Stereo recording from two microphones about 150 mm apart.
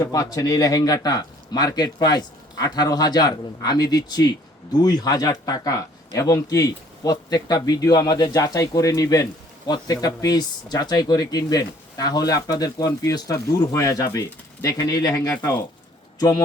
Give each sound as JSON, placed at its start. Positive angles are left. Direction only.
{"t": 0.0, "sound": "speech", "side_deg": 25}